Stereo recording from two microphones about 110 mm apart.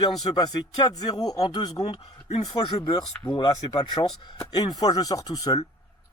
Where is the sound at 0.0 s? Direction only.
40° left (ahead or behind).